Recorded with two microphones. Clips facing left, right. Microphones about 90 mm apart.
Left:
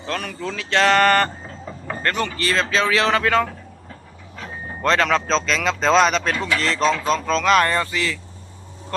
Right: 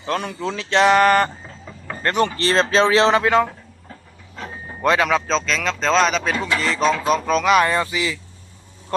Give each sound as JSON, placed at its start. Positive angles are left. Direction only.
{"t": 0.0, "sound": "speech", "side_deg": -30}
{"t": 2.1, "sound": "speech", "side_deg": -35}
{"t": 4.8, "sound": "speech", "side_deg": -10}